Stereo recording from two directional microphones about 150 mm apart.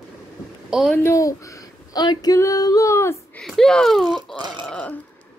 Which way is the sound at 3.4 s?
5° left (ahead or behind).